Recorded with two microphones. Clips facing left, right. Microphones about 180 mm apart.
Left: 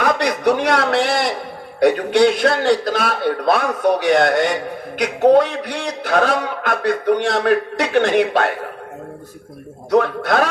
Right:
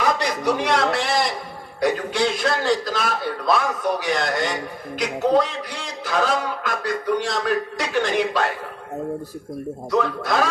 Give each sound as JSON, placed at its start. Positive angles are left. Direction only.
{"t": 0.0, "sound": "a man's voice", "side_deg": 60}
{"t": 9.9, "sound": "a man's voice", "side_deg": 60}